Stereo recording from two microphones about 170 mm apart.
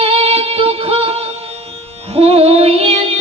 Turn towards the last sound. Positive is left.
turn(degrees=-35)  # may be behind; listen again after turning